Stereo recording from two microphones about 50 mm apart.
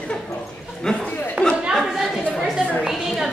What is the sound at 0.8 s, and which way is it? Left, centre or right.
Speech, centre.